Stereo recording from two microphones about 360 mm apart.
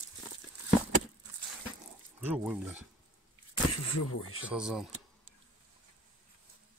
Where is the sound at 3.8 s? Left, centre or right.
Left.